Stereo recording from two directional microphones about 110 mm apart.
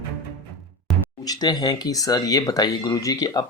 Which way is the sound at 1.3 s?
40° left (ahead or behind).